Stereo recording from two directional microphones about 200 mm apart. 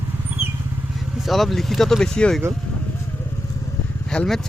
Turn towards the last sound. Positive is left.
turn(degrees=5)  # may be behind; listen again after turning